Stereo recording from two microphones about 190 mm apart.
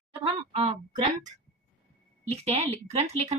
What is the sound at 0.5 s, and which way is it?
Speech, 35° right (ahead or behind).